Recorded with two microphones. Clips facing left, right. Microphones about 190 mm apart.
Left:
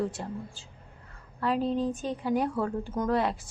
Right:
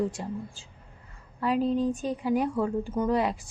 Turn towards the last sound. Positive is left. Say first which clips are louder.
# right 1 dB
turn(degrees=0)  # may be behind; listen again after turning